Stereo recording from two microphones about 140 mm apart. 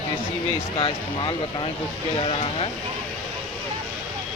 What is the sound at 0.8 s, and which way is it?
Speech, 35° left (ahead or behind).